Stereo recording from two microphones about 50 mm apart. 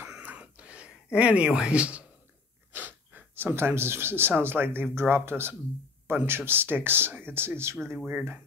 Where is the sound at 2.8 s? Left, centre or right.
Right.